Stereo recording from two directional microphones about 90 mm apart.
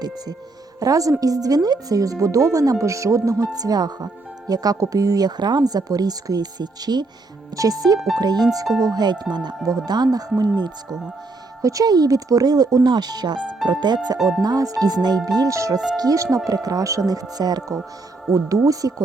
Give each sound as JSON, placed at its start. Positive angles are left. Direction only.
{"t": 0.8, "sound": "speech", "side_deg": -40}
{"t": 7.9, "sound": "speech", "side_deg": -5}
{"t": 8.2, "sound": "speech", "side_deg": -50}
{"t": 11.6, "sound": "speech", "side_deg": -40}
{"t": 14.2, "sound": "speech", "side_deg": 0}
{"t": 14.4, "sound": "speech", "side_deg": -40}
{"t": 18.3, "sound": "speech", "side_deg": -35}